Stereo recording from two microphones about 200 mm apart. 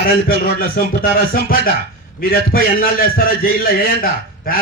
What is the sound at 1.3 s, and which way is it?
A man's voice, 45° left (ahead or behind).